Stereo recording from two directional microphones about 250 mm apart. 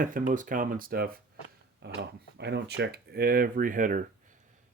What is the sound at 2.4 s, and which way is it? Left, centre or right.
Speech, right.